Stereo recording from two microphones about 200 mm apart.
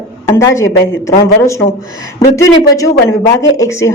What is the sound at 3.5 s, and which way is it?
Speech, 15° left (ahead or behind).